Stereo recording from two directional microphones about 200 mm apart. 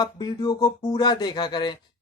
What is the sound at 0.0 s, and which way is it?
Speech, 20° left (ahead or behind).